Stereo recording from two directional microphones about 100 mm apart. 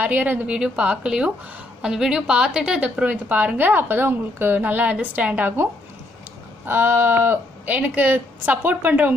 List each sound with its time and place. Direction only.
0.0 s a woman's voice: 15° right (ahead or behind)